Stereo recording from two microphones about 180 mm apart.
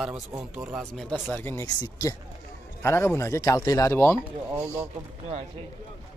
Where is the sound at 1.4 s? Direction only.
15° left (ahead or behind).